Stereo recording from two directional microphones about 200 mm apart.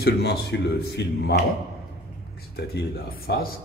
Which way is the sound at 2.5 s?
55° left (ahead or behind).